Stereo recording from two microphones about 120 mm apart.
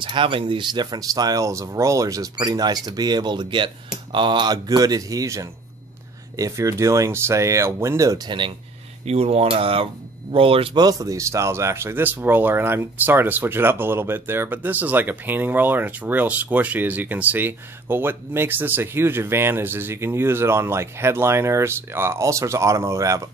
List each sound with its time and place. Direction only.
0.0 s speech: 45° right (ahead or behind); by 8.2 s 25° right (ahead or behind)
8.3 s speech: 45° right (ahead or behind)
9.0 s speech: 60° right (ahead or behind)
10.8 s speech: 30° right (ahead or behind)